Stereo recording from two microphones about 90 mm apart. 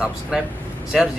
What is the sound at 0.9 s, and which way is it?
Speech, 10° right (ahead or behind).